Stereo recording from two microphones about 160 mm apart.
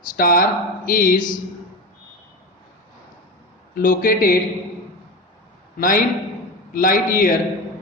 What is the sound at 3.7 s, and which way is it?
Speech, 60° left (ahead or behind).